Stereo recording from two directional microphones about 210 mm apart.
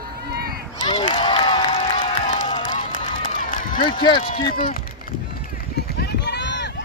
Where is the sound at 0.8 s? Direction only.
25° left (ahead or behind).